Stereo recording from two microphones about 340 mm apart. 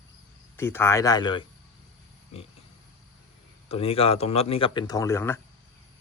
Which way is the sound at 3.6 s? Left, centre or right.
Centre.